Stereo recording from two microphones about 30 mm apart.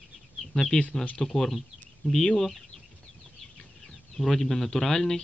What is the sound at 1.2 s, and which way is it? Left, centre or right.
A man's voice, centre.